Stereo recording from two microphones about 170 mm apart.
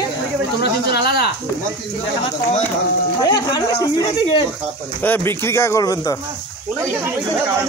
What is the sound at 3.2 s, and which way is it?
Speech, 25° left (ahead or behind).